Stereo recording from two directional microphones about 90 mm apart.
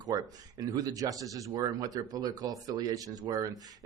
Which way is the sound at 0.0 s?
45° right (ahead or behind).